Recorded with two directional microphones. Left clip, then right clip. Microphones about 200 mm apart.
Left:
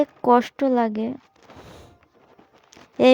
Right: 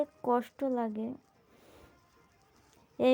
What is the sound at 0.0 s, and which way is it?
Speech, 40° left (ahead or behind).